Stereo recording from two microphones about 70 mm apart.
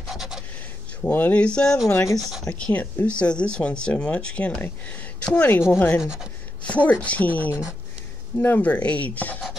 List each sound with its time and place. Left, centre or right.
0.0 s scratch: centre
1.0 s speech: left
5.7 s speech: left
5.9 s speech: centre
6.6 s speech: left